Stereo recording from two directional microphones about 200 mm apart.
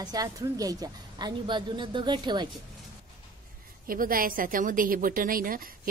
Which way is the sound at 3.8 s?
45° right (ahead or behind).